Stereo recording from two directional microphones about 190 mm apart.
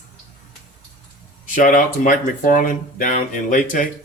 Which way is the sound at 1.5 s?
45° left (ahead or behind).